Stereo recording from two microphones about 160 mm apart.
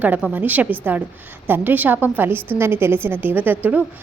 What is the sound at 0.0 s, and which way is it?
A woman's voice, 10° right (ahead or behind).